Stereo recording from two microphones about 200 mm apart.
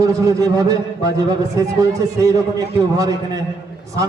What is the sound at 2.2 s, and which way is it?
A man's voice, 15° right (ahead or behind).